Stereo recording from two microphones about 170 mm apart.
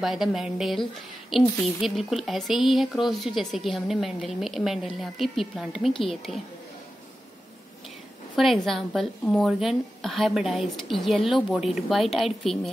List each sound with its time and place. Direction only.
0.0 s speech: centre (ahead or behind)
6.3 s a woman's voice: 40° left (ahead or behind)
8.4 s speech: centre (ahead or behind)